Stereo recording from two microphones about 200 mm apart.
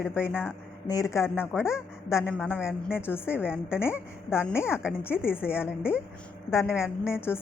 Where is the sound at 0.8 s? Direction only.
15° left (ahead or behind).